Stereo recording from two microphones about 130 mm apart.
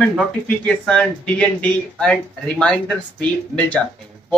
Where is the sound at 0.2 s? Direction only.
10° left (ahead or behind).